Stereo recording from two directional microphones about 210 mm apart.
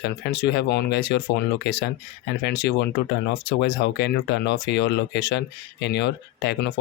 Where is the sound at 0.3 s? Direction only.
55° left (ahead or behind).